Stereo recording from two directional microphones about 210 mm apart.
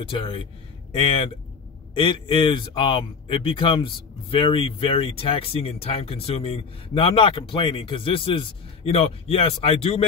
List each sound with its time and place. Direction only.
0.0 s speech: 25° left (ahead or behind)